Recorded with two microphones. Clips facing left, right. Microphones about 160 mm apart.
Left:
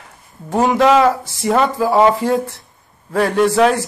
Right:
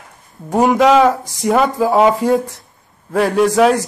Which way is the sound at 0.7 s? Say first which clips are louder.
Right 1 dB; centre (ahead or behind).